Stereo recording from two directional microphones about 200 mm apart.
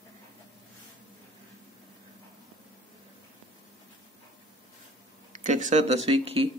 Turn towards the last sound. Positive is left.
turn(degrees=-30)  # may be behind; listen again after turning